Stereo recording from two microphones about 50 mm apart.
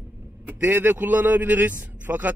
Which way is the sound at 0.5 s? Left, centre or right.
Right.